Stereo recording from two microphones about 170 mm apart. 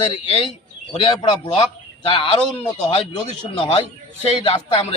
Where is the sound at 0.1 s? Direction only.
30° left (ahead or behind).